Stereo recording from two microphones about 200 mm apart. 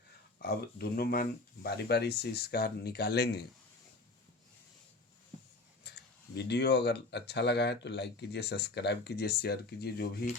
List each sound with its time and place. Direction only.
0.3 s speech: 50° left (ahead or behind)
5.8 s a sound: 55° left (ahead or behind)
6.3 s speech: 55° left (ahead or behind)